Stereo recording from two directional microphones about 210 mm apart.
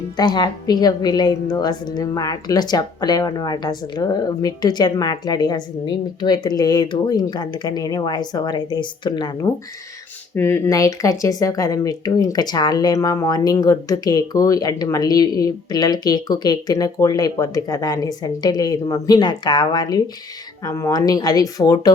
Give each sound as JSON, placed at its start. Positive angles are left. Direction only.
{"t": 0.2, "sound": "a woman's voice", "side_deg": 20}